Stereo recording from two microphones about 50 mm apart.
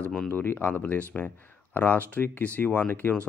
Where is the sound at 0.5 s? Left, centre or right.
Left.